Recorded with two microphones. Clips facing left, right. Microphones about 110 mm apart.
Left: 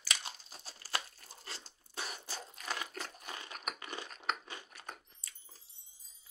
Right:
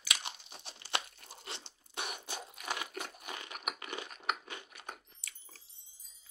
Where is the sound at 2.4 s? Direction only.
10° right (ahead or behind).